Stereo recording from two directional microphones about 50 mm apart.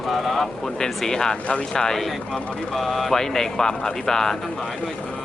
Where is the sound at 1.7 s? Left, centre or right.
Centre.